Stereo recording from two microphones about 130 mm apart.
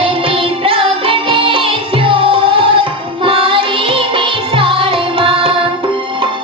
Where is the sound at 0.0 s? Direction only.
45° right (ahead or behind).